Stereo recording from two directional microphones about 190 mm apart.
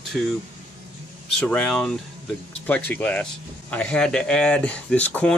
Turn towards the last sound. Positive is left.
turn(degrees=5)  # may be behind; listen again after turning